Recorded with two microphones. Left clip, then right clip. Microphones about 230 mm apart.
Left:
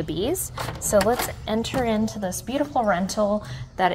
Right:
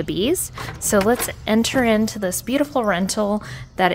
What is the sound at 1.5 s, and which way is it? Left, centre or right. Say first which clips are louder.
A woman's voice: right 7 dB; right.